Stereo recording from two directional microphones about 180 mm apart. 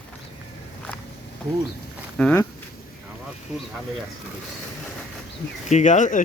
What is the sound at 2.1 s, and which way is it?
Speech, 5° left (ahead or behind).